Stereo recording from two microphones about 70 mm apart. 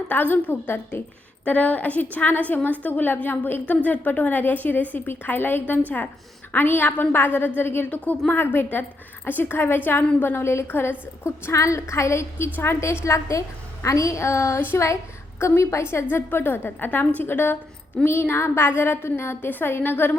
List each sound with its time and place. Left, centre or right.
0.1 s a woman's voice: left
11.5 s a woman's voice: left
13.1 s a woman's voice: left